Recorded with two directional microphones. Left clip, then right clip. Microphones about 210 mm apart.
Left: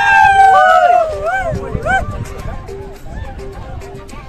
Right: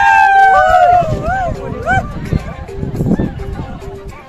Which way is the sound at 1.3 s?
35° left (ahead or behind).